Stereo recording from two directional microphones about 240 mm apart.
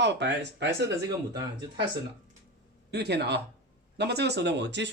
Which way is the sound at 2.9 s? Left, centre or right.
Right.